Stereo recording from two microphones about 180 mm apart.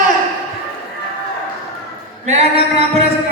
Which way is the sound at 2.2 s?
35° right (ahead or behind).